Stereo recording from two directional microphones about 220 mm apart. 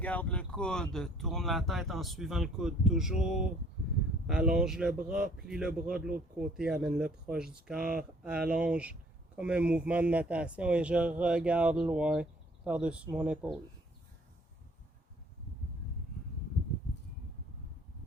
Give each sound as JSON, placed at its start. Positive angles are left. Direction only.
{"t": 0.0, "sound": "speech", "side_deg": 5}
{"t": 6.1, "sound": "speech", "side_deg": -40}
{"t": 6.6, "sound": "speech", "side_deg": -5}